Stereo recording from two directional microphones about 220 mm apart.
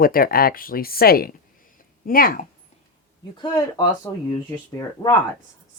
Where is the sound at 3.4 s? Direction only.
15° left (ahead or behind).